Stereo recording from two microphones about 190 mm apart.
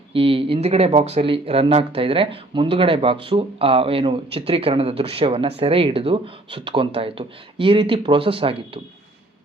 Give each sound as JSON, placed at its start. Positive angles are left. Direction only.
{"t": 0.1, "sound": "speech", "side_deg": -30}